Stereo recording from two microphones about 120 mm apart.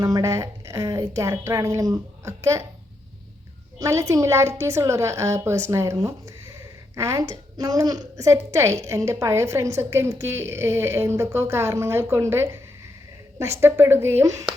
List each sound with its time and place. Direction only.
0.0 s a woman's voice: 25° right (ahead or behind)
3.8 s a woman's voice: 25° right (ahead or behind)